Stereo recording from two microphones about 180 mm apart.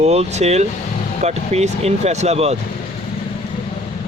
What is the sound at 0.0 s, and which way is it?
Speech, 35° right (ahead or behind).